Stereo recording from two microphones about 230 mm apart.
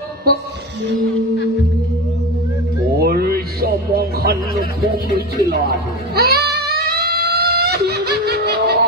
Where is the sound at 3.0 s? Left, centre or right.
Right.